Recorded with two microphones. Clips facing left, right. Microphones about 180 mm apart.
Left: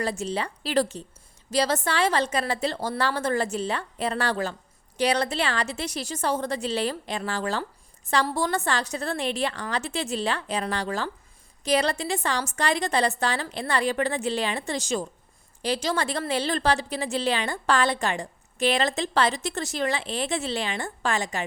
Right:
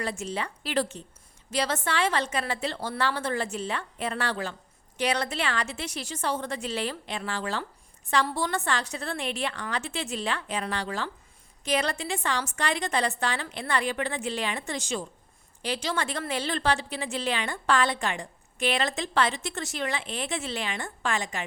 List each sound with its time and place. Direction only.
0.0 s a woman's voice: 35° left (ahead or behind)